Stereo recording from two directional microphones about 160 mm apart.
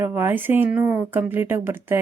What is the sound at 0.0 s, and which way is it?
A woman's voice, 15° right (ahead or behind).